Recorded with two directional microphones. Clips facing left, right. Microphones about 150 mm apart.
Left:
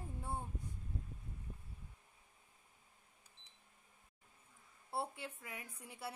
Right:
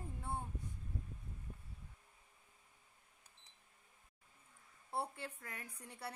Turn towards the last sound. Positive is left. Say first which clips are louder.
# left 1 dB
turn(degrees=5)  # may be behind; listen again after turning